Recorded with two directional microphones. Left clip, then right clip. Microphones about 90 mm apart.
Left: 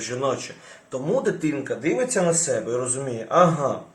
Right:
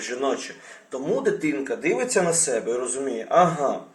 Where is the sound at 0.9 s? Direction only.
20° left (ahead or behind).